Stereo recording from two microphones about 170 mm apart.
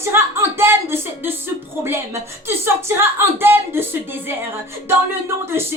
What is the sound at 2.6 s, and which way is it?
A woman's voice, 15° right (ahead or behind).